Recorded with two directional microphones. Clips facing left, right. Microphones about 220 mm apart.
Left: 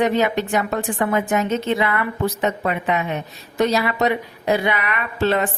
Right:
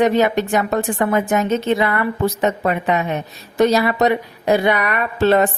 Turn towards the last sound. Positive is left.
turn(degrees=-40)  # may be behind; listen again after turning